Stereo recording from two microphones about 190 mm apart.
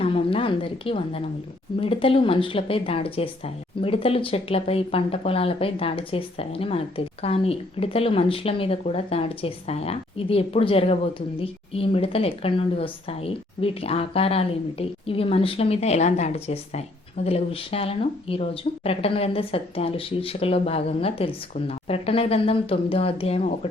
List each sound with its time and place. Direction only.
0.0 s a woman's voice: 30° left (ahead or behind)